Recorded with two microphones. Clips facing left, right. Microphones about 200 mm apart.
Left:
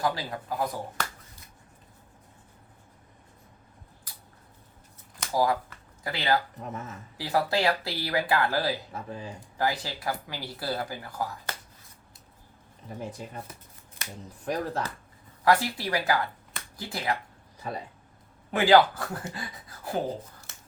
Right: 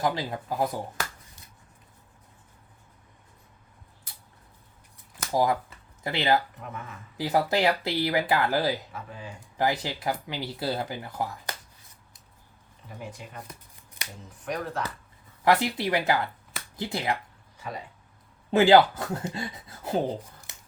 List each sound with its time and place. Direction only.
0.0 s speech: 20° right (ahead or behind)
5.3 s speech: 20° right (ahead or behind)
6.6 s speech: 40° left (ahead or behind)
7.2 s speech: 20° right (ahead or behind)
8.9 s speech: 35° left (ahead or behind)
9.6 s speech: 20° right (ahead or behind)
13.0 s speech: 35° left (ahead or behind)
14.4 s speech: 35° left (ahead or behind)
15.4 s speech: 20° right (ahead or behind)
18.5 s speech: 25° right (ahead or behind)